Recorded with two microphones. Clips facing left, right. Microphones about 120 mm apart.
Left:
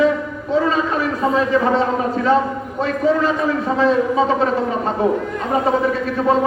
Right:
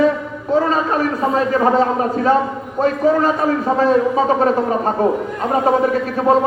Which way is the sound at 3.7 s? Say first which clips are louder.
Even; 45° right (ahead or behind).